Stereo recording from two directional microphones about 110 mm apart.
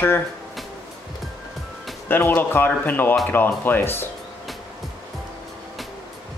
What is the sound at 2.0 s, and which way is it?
Speech, 15° left (ahead or behind).